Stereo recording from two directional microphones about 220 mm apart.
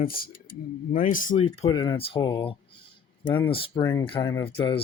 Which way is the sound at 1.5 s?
25° left (ahead or behind).